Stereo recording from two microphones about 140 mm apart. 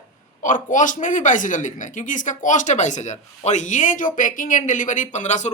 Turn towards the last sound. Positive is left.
turn(degrees=55)  # may be behind; listen again after turning